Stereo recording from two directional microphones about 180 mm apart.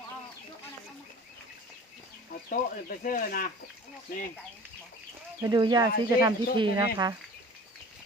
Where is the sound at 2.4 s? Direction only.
50° left (ahead or behind).